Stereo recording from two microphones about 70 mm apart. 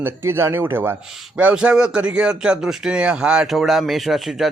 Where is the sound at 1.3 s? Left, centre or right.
Centre.